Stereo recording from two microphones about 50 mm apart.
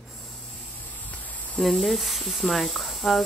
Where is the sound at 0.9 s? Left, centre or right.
Left.